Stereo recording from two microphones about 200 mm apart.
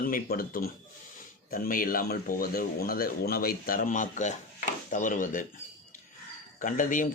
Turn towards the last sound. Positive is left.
turn(degrees=40)  # may be behind; listen again after turning